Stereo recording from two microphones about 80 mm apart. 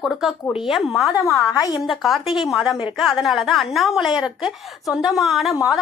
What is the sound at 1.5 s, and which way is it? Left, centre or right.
Speech, left.